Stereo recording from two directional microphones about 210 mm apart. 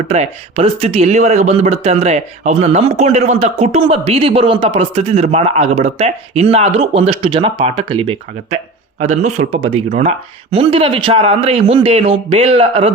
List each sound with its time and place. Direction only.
0.1 s speech: 30° right (ahead or behind)